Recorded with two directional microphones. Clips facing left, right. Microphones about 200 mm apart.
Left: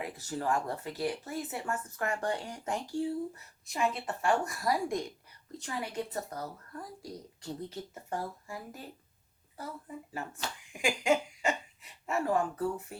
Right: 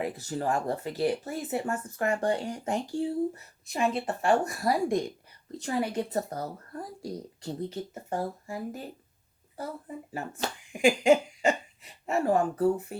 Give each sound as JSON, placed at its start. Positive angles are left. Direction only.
{"t": 0.0, "sound": "speech", "side_deg": -30}